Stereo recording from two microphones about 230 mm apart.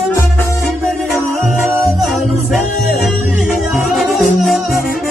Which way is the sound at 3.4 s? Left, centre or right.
Centre.